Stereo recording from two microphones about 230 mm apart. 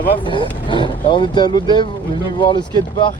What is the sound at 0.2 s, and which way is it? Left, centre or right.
Speech, left.